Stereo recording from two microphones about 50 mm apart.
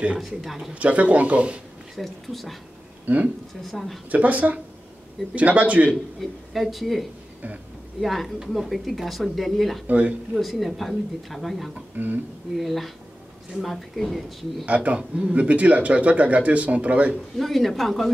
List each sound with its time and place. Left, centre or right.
0.2 s speech: centre
0.7 s speech: right
2.0 s speech: centre
3.1 s speech: right
3.6 s speech: centre
4.1 s speech: right
6.5 s speech: centre
9.8 s speech: right
10.3 s speech: centre
12.0 s speech: right
12.5 s speech: centre
14.7 s speech: right
17.4 s speech: centre